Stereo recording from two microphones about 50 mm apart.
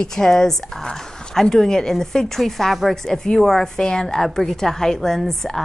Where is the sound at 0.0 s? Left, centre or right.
Centre.